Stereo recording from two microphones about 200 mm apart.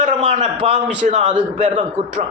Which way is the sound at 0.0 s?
35° right (ahead or behind).